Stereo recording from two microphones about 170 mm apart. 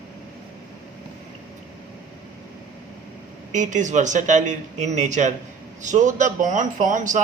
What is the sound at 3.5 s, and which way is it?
A man's voice, 45° right (ahead or behind).